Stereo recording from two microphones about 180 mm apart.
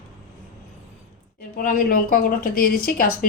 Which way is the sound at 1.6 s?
50° left (ahead or behind).